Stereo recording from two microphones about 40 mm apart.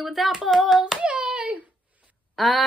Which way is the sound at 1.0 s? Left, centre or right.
Right.